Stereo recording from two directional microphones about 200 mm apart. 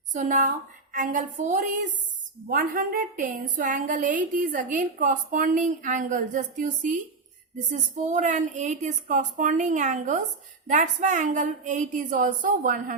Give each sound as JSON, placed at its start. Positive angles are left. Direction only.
{"t": 0.1, "sound": "a woman's voice", "side_deg": -40}